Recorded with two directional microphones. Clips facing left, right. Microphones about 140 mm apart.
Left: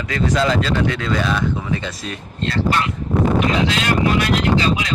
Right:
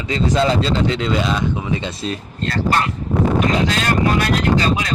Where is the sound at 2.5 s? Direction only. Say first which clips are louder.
Right 1 dB; 45° right (ahead or behind).